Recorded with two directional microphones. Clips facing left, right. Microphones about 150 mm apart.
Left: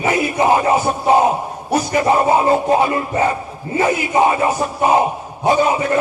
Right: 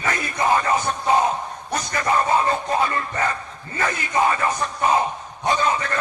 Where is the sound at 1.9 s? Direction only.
20° left (ahead or behind).